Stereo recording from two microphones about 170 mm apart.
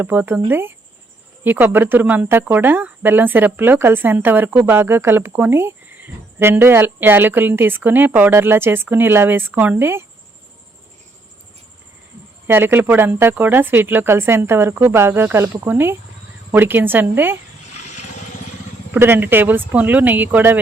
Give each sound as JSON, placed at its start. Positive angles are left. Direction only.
{"t": 0.0, "sound": "speech", "side_deg": -10}
{"t": 12.5, "sound": "speech", "side_deg": -10}
{"t": 17.7, "sound": "vehicle", "side_deg": 45}
{"t": 18.9, "sound": "speech", "side_deg": -15}